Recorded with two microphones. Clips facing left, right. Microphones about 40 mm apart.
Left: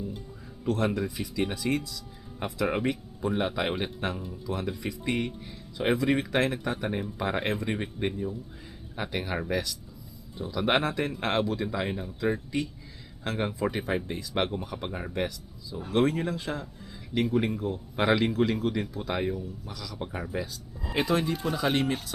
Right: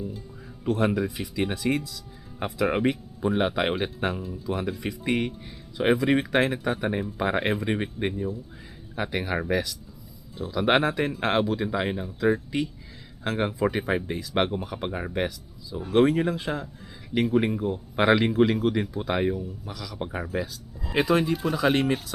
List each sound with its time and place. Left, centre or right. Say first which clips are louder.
0.6 s speech: right 3 dB; centre
1.5 s speech: right 3 dB; centre
2.6 s speech: right 4 dB; centre
12.0 s speech: right 5 dB; centre
20.3 s speech: right 3 dB; centre